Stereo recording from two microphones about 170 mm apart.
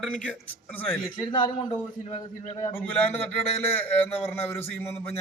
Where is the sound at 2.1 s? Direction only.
40° left (ahead or behind).